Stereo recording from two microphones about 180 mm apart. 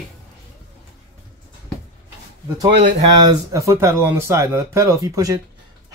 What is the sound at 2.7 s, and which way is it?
Speech, 40° right (ahead or behind).